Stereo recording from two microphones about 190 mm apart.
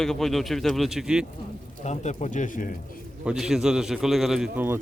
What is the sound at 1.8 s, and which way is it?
Speech, 35° left (ahead or behind).